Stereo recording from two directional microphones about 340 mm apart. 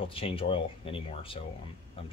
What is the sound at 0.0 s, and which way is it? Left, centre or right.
Speech, centre.